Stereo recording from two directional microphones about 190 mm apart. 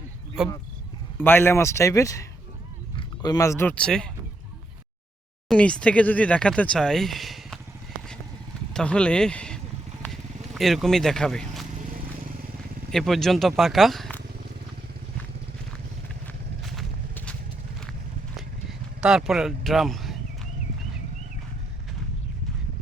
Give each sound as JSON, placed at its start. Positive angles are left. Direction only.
{"t": 0.4, "sound": "speech", "side_deg": 0}
{"t": 1.2, "sound": "a man's voice", "side_deg": 10}
{"t": 5.5, "sound": "speech", "side_deg": 5}
{"t": 8.7, "sound": "speech", "side_deg": 5}
{"t": 10.0, "sound": "vehicle", "side_deg": 0}
{"t": 11.7, "sound": "vehicle", "side_deg": -45}
{"t": 12.9, "sound": "speech", "side_deg": 0}
{"t": 16.2, "sound": "horse", "side_deg": 5}
{"t": 18.3, "sound": "vehicle", "side_deg": 0}